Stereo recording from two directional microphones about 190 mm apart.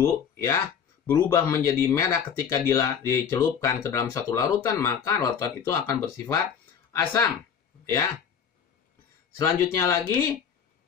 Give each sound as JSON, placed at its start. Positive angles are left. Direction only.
{"t": 0.0, "sound": "speech", "side_deg": 15}
{"t": 9.4, "sound": "speech", "side_deg": 15}